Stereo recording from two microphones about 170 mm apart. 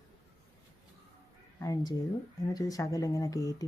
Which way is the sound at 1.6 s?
25° left (ahead or behind).